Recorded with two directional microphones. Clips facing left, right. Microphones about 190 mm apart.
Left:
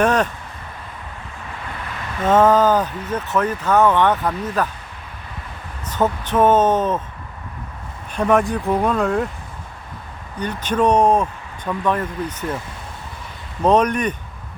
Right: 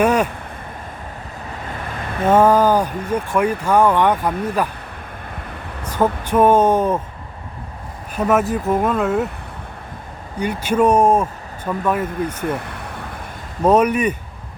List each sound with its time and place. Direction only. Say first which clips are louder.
0.0 s speech: right 1 dB; 10° right (ahead or behind)
2.2 s speech: right 1 dB; 10° right (ahead or behind)
5.8 s speech: right 1 dB; 10° right (ahead or behind)
8.1 s speech: even; 5° right (ahead or behind)
10.4 s speech: right 2 dB; 10° right (ahead or behind)
12.5 s speech: right 3 dB; 60° right (ahead or behind)
13.7 s speech: right 2 dB; 10° right (ahead or behind)